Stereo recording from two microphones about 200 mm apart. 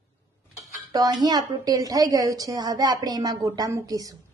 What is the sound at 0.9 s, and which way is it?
A woman's voice, 20° right (ahead or behind).